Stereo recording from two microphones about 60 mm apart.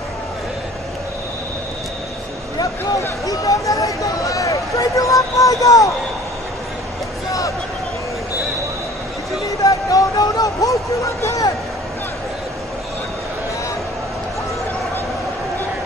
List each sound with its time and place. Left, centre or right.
3.3 s speech: left
9.6 s music: left
11.2 s a man's voice: left